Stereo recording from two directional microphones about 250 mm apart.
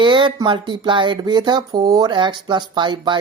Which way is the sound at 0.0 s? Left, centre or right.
Centre.